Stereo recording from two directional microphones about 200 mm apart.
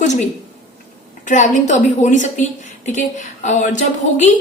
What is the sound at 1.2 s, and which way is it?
A woman's voice, 40° left (ahead or behind).